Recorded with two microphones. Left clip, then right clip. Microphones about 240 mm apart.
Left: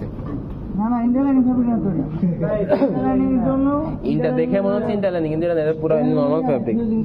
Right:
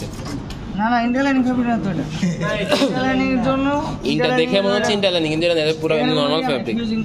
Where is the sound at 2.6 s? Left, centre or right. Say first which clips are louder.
Right 1 dB; right.